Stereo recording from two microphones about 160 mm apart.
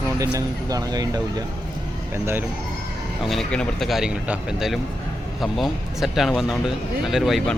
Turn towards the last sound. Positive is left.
turn(degrees=0)  # may be behind; listen again after turning